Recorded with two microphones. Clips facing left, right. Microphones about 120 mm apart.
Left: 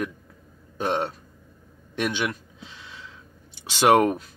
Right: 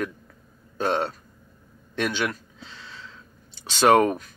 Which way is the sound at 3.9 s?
20° left (ahead or behind).